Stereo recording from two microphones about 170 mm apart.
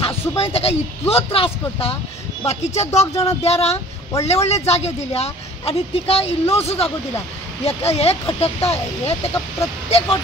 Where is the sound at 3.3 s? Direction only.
35° left (ahead or behind).